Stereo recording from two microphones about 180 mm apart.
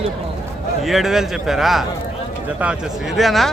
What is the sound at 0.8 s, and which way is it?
A man's voice, centre (ahead or behind).